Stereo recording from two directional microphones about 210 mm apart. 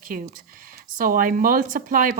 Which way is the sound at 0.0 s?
40° right (ahead or behind).